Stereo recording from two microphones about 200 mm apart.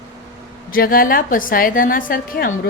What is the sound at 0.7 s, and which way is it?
A woman's voice, 45° left (ahead or behind).